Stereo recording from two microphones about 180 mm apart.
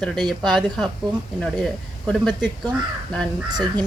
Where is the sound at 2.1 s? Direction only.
Centre (ahead or behind).